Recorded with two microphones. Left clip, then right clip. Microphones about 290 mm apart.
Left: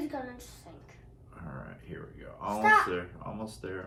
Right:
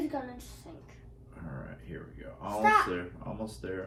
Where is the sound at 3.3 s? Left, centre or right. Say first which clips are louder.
Right 1 dB; centre.